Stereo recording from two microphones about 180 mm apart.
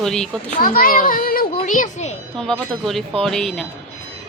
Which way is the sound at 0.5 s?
50° left (ahead or behind).